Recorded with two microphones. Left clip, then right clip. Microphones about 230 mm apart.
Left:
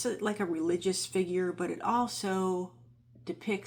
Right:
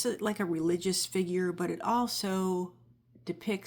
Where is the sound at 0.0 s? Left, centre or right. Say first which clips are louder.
Even; right.